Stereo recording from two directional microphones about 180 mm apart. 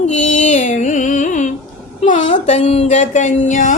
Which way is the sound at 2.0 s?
45° left (ahead or behind).